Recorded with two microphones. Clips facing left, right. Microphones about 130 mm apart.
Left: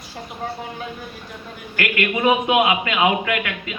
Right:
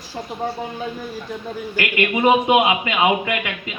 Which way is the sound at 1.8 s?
20° right (ahead or behind).